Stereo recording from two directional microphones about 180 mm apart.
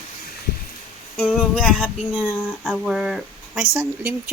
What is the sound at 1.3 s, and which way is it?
Speech, 5° left (ahead or behind).